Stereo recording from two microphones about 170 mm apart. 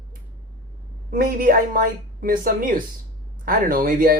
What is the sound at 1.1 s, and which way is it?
Speech, 60° right (ahead or behind).